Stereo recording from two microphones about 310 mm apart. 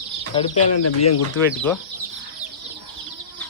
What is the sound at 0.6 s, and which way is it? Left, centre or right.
Speech, left.